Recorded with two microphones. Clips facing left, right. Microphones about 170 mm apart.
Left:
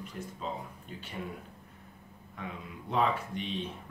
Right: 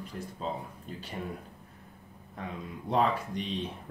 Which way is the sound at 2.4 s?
35° right (ahead or behind).